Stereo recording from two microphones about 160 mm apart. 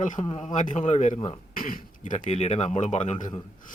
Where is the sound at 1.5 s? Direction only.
60° left (ahead or behind); by 3.2 s 45° left (ahead or behind).